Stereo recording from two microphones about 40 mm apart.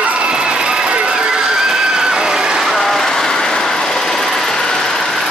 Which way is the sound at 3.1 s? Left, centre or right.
Centre.